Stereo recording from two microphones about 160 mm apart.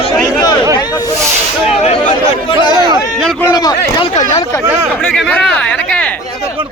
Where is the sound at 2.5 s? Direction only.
30° left (ahead or behind).